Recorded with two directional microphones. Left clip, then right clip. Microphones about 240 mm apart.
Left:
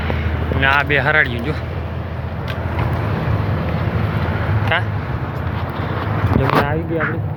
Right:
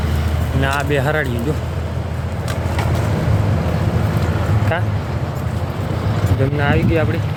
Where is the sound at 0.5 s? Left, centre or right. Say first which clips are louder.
Left 4 dB; right.